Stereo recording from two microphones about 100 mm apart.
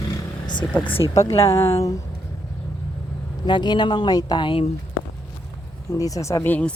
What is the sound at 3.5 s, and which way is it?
Speech, 50° left (ahead or behind).